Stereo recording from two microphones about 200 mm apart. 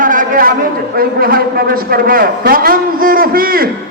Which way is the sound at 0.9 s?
45° right (ahead or behind).